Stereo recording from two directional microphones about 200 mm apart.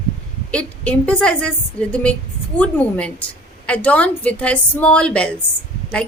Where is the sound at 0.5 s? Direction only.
5° left (ahead or behind).